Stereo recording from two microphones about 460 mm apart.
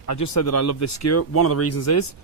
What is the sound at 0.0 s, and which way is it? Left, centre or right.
Speech, left.